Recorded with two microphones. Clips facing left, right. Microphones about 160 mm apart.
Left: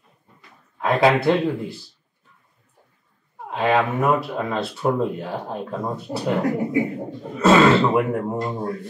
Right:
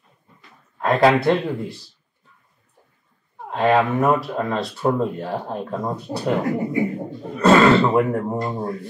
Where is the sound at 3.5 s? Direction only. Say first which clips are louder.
Right 2 dB; centre (ahead or behind).